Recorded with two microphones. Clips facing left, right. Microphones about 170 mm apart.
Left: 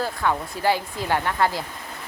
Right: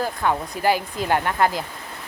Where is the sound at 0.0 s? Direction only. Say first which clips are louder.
Right 1 dB; 15° right (ahead or behind).